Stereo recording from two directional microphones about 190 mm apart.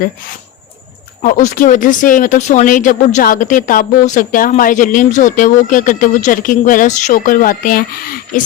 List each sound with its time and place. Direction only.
1.2 s speech: 45° left (ahead or behind)